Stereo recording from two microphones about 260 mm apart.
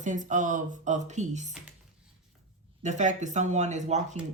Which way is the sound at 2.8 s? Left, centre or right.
Right.